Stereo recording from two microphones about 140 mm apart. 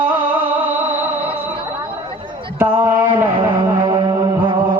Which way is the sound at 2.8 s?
15° right (ahead or behind).